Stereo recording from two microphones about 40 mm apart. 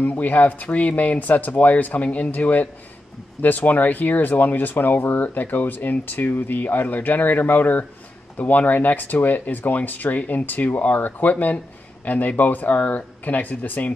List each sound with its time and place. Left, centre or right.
0.0 s speech: left